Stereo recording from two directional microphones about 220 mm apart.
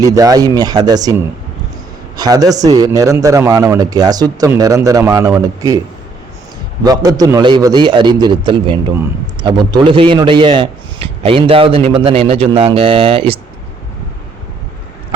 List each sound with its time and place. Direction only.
0.0 s a man's voice: 15° right (ahead or behind)
2.1 s a man's voice: 15° right (ahead or behind)
6.8 s a man's voice: 15° right (ahead or behind)